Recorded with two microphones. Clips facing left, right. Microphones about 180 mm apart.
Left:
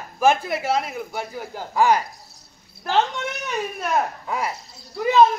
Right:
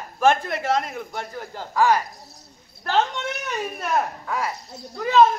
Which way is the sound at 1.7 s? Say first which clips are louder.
Left 1 dB; 20° left (ahead or behind).